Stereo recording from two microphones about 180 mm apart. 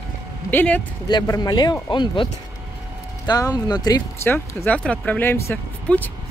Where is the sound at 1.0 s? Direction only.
20° left (ahead or behind).